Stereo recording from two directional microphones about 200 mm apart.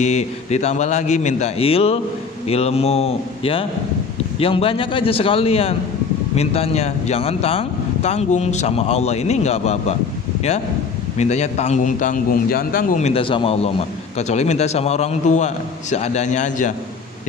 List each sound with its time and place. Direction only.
0.0 s a man's voice: 35° left (ahead or behind)
11.1 s a man's voice: 35° left (ahead or behind)